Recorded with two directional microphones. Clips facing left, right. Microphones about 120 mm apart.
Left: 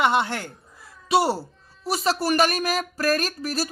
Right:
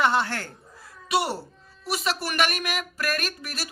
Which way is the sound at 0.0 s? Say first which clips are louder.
Left 2 dB; 20° left (ahead or behind).